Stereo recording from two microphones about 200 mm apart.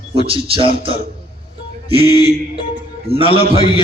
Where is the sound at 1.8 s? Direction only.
30° right (ahead or behind).